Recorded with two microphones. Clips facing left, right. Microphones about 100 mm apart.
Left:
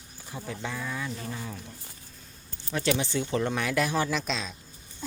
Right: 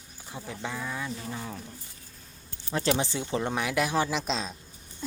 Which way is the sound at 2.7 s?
35° right (ahead or behind).